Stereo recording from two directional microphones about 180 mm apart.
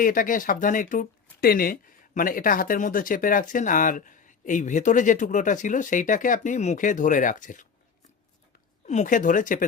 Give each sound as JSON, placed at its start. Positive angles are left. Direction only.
{"t": 0.0, "sound": "speech", "side_deg": 50}
{"t": 8.9, "sound": "speech", "side_deg": 45}